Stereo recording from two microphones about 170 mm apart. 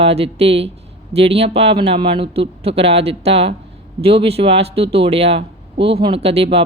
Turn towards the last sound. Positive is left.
turn(degrees=-35)  # may be behind; listen again after turning